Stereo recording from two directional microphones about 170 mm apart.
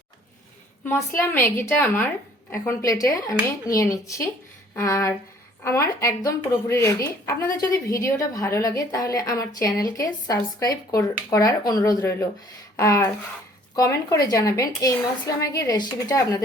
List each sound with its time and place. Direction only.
0.9 s a woman's voice: 15° left (ahead or behind)